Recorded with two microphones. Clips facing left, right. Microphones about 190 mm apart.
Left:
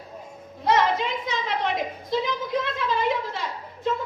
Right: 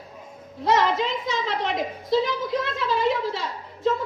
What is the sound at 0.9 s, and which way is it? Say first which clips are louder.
A woman's voice: right 2 dB; 55° left (ahead or behind).